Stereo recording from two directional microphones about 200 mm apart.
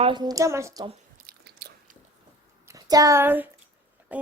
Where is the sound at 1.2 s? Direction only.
50° right (ahead or behind).